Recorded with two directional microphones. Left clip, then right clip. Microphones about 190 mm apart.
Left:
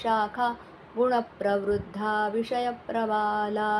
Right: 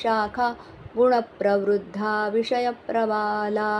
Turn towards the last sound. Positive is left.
turn(degrees=-20)  # may be behind; listen again after turning